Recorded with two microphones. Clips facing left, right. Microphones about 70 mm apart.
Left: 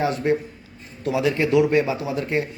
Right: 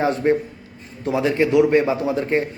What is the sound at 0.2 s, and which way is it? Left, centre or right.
A man's voice, right.